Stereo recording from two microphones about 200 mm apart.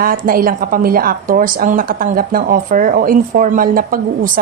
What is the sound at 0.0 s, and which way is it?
Speech, 45° right (ahead or behind).